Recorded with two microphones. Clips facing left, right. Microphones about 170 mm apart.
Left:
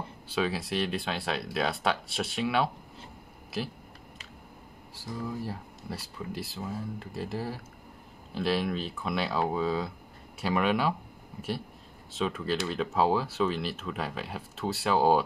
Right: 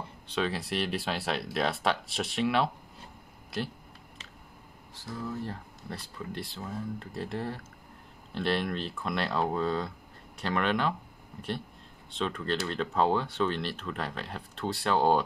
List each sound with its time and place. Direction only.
0.3 s speech: 5° left (ahead or behind)
4.9 s speech: 10° left (ahead or behind)
12.1 s speech: 5° left (ahead or behind)